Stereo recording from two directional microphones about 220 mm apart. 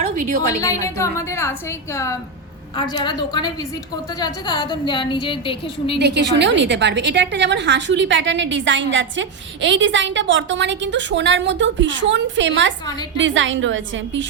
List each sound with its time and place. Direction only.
0.0 s a woman's voice: 35° right (ahead or behind)
0.6 s a woman's voice: 15° left (ahead or behind)
6.0 s a woman's voice: 50° right (ahead or behind)